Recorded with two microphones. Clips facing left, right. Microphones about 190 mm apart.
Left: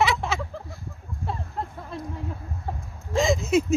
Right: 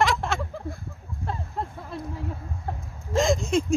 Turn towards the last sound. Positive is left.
turn(degrees=5)  # may be behind; listen again after turning